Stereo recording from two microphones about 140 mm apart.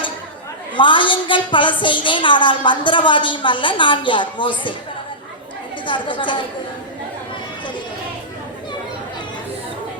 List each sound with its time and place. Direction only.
0.8 s a woman's voice: 35° left (ahead or behind)
5.8 s a woman's voice: 35° left (ahead or behind)